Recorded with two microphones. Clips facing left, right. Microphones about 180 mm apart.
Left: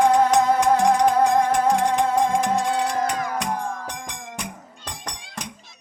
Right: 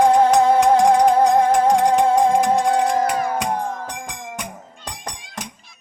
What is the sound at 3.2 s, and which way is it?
Music, 30° right (ahead or behind).